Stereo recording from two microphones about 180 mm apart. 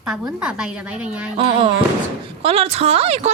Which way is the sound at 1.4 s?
30° right (ahead or behind).